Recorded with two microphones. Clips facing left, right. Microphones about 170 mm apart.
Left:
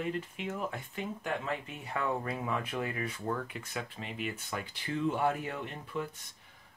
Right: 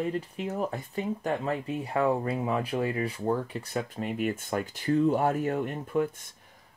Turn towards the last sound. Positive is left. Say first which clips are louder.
# right 10 dB
turn(degrees=-50)  # may be behind; listen again after turning